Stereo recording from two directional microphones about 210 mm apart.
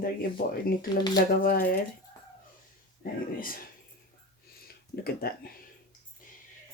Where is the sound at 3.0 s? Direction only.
40° left (ahead or behind).